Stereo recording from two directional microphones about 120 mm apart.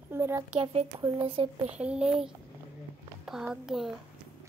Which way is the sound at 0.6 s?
60° right (ahead or behind).